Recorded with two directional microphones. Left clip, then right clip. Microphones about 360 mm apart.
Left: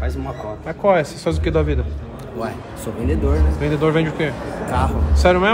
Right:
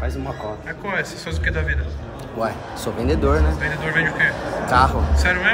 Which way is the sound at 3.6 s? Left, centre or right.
Centre.